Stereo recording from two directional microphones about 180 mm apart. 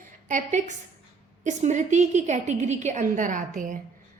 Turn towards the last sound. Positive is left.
turn(degrees=-45)  # may be behind; listen again after turning